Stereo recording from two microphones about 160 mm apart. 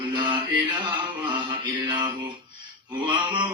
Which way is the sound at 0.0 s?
30° right (ahead or behind).